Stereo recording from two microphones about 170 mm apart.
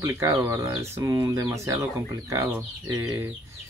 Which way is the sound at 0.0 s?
15° right (ahead or behind).